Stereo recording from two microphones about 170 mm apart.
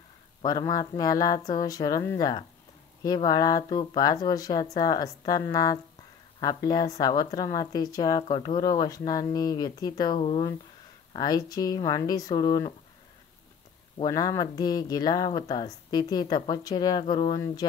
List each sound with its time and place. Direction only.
0.4 s speech: 25° left (ahead or behind)
13.9 s speech: 20° left (ahead or behind)